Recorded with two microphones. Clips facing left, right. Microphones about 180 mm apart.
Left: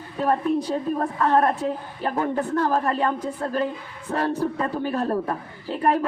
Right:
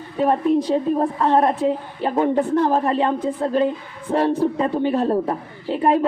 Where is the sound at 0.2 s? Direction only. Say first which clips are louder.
Right 4 dB; 25° right (ahead or behind).